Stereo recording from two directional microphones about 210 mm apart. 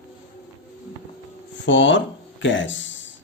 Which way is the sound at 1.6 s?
60° left (ahead or behind).